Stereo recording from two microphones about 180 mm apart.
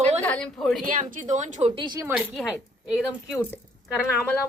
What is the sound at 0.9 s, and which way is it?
Speech, 45° right (ahead or behind).